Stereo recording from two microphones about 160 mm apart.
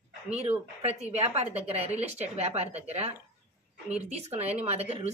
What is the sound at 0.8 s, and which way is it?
Speech, 40° right (ahead or behind).